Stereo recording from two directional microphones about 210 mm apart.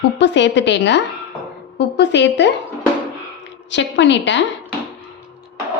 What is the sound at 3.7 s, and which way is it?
Speech, 60° left (ahead or behind).